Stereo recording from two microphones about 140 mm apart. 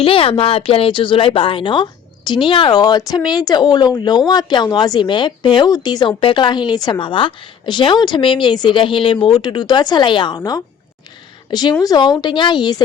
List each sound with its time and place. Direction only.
0.0 s speech: 40° left (ahead or behind)